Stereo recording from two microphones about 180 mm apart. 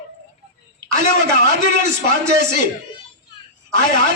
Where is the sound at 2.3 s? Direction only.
70° right (ahead or behind).